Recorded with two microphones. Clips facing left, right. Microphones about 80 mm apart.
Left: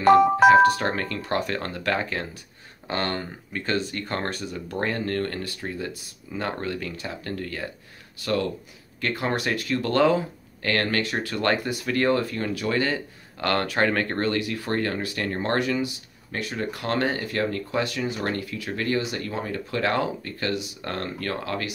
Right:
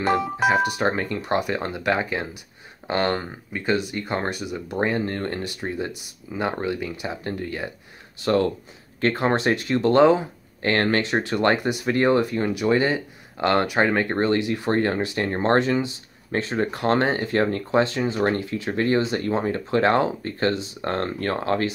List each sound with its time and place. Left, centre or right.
0.5 s speech: centre
8.2 s speech: right